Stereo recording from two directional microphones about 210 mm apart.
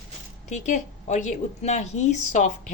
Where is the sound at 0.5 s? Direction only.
35° left (ahead or behind).